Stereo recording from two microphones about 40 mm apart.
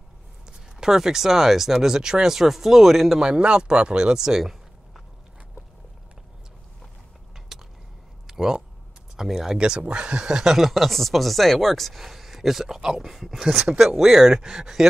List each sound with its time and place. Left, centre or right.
0.5 s speech: centre
3.2 s speech: right
7.3 s a sound: centre
9.1 s speech: centre
9.8 s speech: right
10.5 s speech: centre
13.4 s speech: centre
14.4 s speech: centre